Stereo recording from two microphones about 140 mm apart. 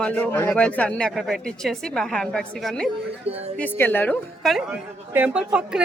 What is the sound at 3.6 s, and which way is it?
Speech, 15° left (ahead or behind).